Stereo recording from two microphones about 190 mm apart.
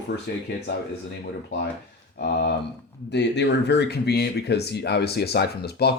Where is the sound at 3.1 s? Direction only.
65° left (ahead or behind).